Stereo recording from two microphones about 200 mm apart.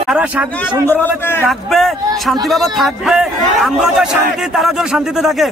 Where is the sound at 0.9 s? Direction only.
10° left (ahead or behind).